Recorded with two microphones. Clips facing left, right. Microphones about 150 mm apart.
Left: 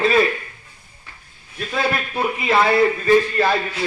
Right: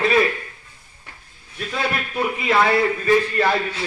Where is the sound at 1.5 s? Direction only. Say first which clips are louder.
Left 3 dB; 25° left (ahead or behind).